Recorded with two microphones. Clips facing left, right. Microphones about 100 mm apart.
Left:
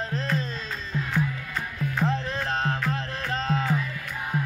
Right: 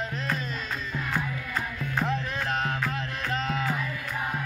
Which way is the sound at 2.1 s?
30° left (ahead or behind).